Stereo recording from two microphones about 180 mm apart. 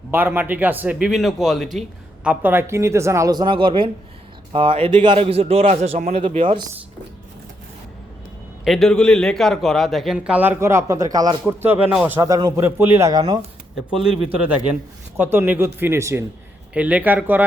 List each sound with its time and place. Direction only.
0.1 s a man's voice: 10° right (ahead or behind); by 6.6 s 35° right (ahead or behind)
8.6 s a man's voice: centre (ahead or behind); by 13.2 s 15° right (ahead or behind)
13.7 s a man's voice: 5° right (ahead or behind)